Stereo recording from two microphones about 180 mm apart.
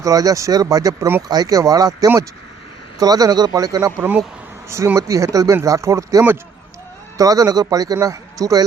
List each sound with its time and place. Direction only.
0.0 s speech: 20° right (ahead or behind)